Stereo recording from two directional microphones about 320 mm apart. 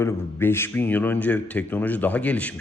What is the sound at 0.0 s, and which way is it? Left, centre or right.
A man's voice, centre.